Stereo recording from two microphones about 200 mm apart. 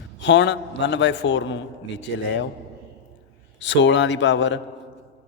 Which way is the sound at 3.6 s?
65° left (ahead or behind).